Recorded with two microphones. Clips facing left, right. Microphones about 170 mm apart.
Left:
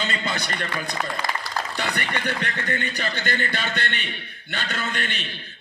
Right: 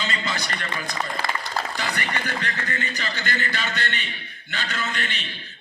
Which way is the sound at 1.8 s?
60° left (ahead or behind).